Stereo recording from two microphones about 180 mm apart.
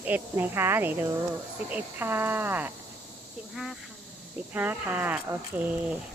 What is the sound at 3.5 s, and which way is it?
Speech, centre (ahead or behind).